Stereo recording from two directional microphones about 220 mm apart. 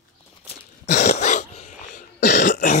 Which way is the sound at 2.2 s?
50° left (ahead or behind).